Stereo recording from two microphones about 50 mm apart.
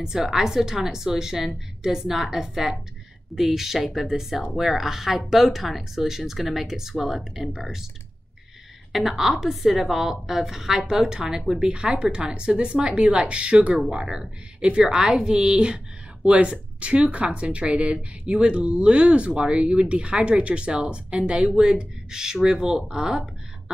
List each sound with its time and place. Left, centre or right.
0.0 s a woman's voice: centre
8.9 s a woman's voice: centre